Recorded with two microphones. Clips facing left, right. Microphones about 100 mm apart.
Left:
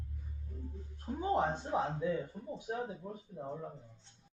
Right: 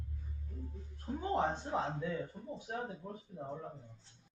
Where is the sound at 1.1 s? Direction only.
15° left (ahead or behind).